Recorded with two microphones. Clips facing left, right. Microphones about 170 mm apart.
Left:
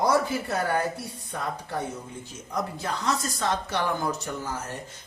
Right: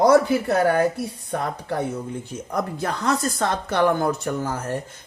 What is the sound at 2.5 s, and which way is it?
Speech, 55° right (ahead or behind).